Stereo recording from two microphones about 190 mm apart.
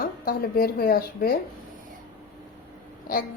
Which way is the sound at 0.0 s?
50° left (ahead or behind).